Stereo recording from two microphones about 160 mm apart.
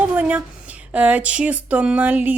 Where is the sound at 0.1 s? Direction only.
10° right (ahead or behind).